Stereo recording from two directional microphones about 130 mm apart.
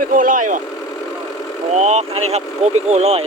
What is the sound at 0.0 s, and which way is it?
Vehicle, 90° right.